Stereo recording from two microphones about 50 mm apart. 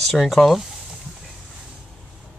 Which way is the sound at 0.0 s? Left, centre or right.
Centre.